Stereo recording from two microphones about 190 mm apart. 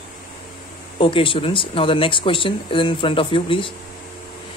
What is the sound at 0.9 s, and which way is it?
Speech, 30° left (ahead or behind).